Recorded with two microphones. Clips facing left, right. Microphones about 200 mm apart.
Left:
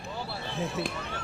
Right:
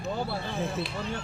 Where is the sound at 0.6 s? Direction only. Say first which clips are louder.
Left 1 dB; centre (ahead or behind).